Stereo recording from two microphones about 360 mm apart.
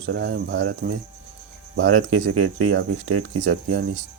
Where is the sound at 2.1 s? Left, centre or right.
Right.